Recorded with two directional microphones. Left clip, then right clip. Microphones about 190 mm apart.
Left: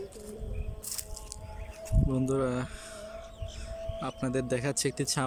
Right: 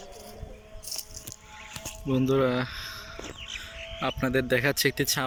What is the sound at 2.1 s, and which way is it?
Speech, 5° left (ahead or behind).